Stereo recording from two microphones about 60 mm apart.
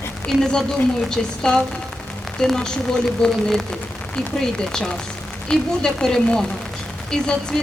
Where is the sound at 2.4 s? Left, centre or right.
Centre.